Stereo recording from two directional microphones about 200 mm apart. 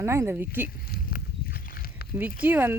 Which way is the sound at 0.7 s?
50° left (ahead or behind).